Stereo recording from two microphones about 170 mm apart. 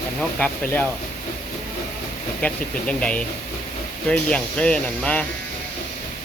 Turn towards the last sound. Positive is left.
turn(degrees=5)  # may be behind; listen again after turning